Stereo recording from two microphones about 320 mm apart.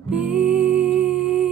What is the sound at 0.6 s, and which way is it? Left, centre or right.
Music, centre.